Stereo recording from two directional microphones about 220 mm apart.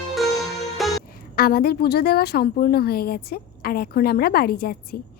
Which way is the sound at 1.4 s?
45° left (ahead or behind).